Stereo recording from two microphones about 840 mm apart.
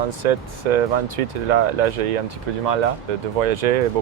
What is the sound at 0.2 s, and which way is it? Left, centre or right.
Speech, right.